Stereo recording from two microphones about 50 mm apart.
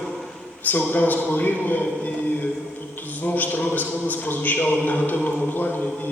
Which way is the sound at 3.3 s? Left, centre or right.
Left.